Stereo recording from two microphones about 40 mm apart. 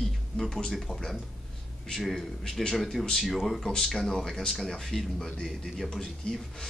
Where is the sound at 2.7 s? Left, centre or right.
Centre.